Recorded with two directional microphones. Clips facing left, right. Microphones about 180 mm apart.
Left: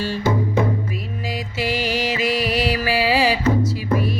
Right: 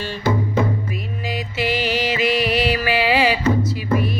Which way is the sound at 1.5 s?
40° left (ahead or behind).